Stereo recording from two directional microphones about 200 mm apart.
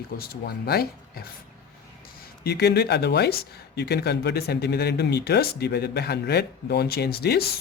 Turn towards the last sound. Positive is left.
turn(degrees=50)  # may be behind; listen again after turning